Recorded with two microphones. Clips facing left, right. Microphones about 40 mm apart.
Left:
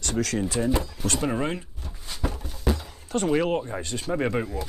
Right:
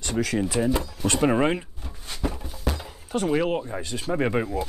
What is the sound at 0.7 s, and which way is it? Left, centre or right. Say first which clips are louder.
Speech: right 3 dB; right.